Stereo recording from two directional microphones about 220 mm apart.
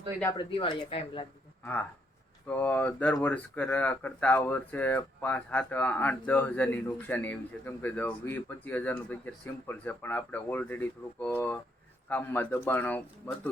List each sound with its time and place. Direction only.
0.2 s speech: 15° left (ahead or behind)
0.5 s speech: 25° left (ahead or behind)
2.5 s speech: 10° left (ahead or behind)